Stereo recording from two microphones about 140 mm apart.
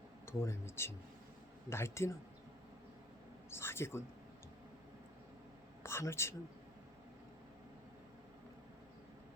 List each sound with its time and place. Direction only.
0.3 s speech: 20° left (ahead or behind)
3.5 s speech: 15° left (ahead or behind)
5.8 s speech: 20° left (ahead or behind)